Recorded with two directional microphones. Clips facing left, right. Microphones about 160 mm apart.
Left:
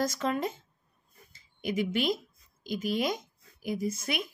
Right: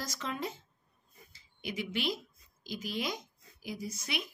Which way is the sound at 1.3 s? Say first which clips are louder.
Left 8 dB; 50° left (ahead or behind).